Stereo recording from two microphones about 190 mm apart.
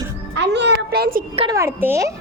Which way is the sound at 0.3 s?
65° right (ahead or behind).